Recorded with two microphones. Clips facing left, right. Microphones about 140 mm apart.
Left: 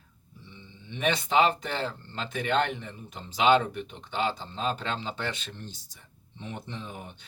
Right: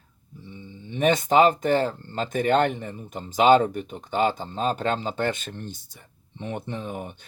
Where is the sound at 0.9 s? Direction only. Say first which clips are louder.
Right 7 dB; 45° right (ahead or behind).